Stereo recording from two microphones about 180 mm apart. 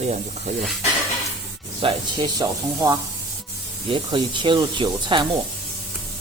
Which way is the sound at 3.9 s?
25° right (ahead or behind).